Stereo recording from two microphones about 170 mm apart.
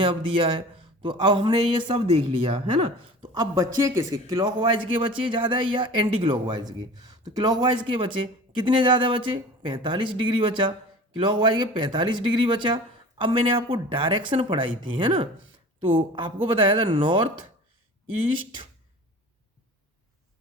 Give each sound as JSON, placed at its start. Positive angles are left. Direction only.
{"t": 0.0, "sound": "a man's voice", "side_deg": -30}